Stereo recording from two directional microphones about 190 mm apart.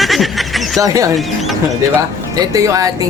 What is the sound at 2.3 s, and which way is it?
Speech, 20° right (ahead or behind).